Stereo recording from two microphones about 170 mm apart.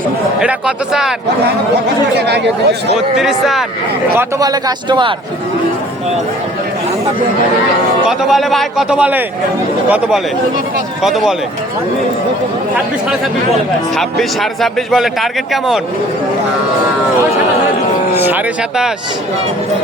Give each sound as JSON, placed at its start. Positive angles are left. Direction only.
{"t": 0.3, "sound": "speech", "side_deg": -5}
{"t": 2.1, "sound": "speech", "side_deg": -80}
{"t": 3.2, "sound": "speech", "side_deg": 0}
{"t": 4.2, "sound": "a man's voice", "side_deg": -20}
{"t": 8.0, "sound": "speech", "side_deg": 0}
{"t": 11.0, "sound": "speech", "side_deg": 0}
{"t": 13.9, "sound": "speech", "side_deg": 0}
{"t": 18.1, "sound": "speech", "side_deg": -10}